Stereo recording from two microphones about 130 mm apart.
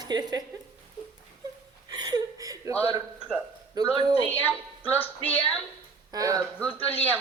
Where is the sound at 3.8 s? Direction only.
30° right (ahead or behind).